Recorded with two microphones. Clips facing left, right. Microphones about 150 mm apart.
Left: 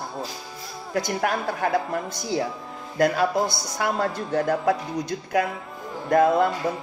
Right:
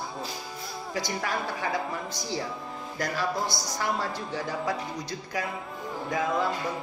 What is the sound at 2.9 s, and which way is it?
Speech, 60° left (ahead or behind).